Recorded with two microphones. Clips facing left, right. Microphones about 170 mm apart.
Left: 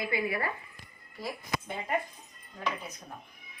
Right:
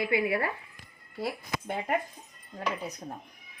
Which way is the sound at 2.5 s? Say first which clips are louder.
Right 3 dB; 35° right (ahead or behind).